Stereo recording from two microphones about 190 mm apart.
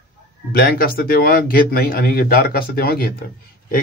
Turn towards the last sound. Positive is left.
turn(degrees=50)  # may be behind; listen again after turning